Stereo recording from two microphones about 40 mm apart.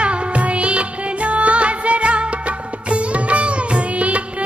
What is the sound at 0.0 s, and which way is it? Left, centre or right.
Music, right.